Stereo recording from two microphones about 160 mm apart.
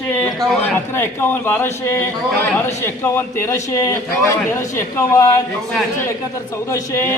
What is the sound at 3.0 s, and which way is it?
A man's voice, 15° left (ahead or behind).